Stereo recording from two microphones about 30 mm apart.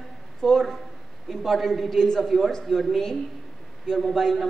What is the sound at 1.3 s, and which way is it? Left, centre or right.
Speech, centre.